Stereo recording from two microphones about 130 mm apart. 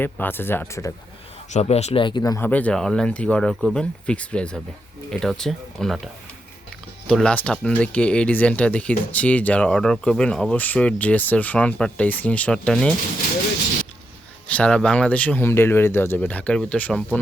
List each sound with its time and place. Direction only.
0.0 s speech: 15° left (ahead or behind)
1.5 s speech: 60° left (ahead or behind); by 2.4 s 30° left (ahead or behind)
2.4 s speech: 10° left (ahead or behind)
7.1 s speech: 5° left (ahead or behind)
14.4 s speech: 10° left (ahead or behind)